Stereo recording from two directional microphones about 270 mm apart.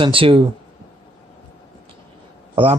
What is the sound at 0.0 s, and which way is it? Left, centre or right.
Speech, centre.